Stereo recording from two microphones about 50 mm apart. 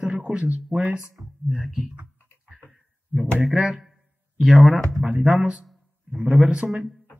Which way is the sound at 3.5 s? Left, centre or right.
Centre.